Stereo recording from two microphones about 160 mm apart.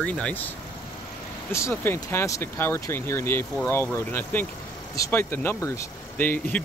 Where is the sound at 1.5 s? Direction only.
15° left (ahead or behind).